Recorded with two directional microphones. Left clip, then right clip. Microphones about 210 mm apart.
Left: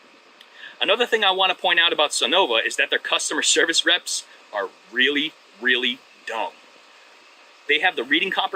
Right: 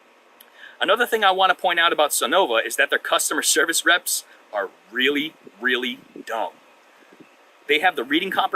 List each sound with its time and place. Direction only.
0.8 s speech: 25° right (ahead or behind)
7.7 s speech: 25° right (ahead or behind)